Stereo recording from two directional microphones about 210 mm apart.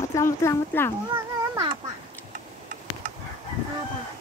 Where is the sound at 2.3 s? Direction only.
35° right (ahead or behind).